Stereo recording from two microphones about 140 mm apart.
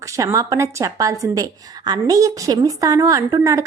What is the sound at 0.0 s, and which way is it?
A woman's voice, 20° right (ahead or behind).